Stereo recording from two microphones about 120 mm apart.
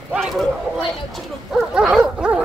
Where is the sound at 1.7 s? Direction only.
5° right (ahead or behind).